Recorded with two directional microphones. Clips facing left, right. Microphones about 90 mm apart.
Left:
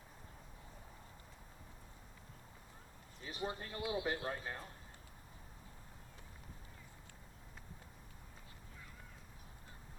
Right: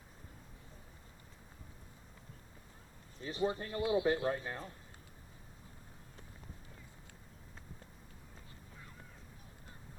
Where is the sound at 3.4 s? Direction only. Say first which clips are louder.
Right 7 dB; 30° right (ahead or behind).